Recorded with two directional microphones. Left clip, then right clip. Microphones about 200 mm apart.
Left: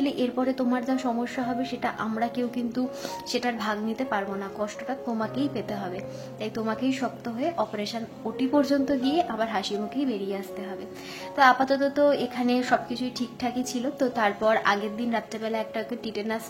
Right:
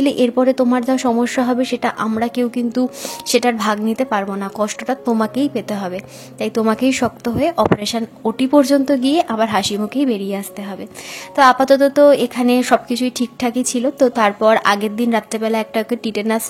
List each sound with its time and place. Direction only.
0.0 s a woman's voice: 40° right (ahead or behind)